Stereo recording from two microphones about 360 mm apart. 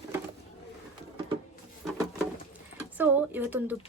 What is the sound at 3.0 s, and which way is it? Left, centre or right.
Speech, centre.